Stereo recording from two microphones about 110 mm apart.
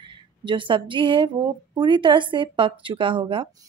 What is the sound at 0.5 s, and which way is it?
A woman's voice, 50° right (ahead or behind).